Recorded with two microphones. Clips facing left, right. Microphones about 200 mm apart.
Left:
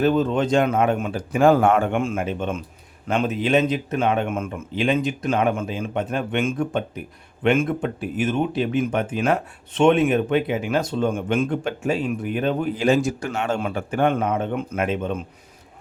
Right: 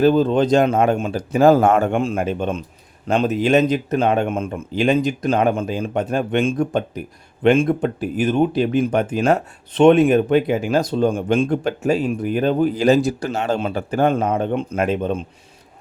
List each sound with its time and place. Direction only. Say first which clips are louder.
0.0 s speech: right 4 dB; 35° right (ahead or behind)